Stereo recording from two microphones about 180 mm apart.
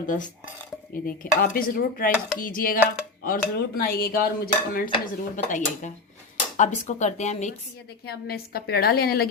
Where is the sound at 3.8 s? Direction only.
55° left (ahead or behind).